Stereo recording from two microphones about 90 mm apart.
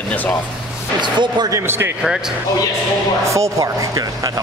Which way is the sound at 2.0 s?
5° right (ahead or behind).